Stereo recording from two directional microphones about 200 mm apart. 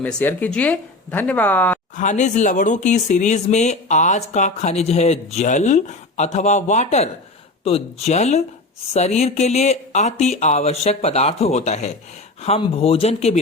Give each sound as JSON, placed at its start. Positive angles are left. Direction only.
{"t": 0.0, "sound": "speech", "side_deg": 10}
{"t": 2.0, "sound": "speech", "side_deg": 35}